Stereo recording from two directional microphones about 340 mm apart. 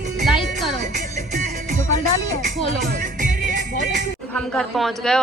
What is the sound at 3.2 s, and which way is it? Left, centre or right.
Music, right.